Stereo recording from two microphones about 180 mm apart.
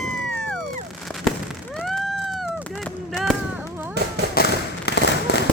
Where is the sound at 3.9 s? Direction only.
65° right (ahead or behind).